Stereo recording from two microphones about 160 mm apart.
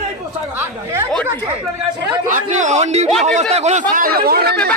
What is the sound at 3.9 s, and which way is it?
Speech, 65° right (ahead or behind).